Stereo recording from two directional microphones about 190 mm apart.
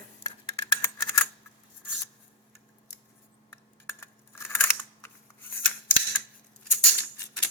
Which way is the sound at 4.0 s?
15° left (ahead or behind).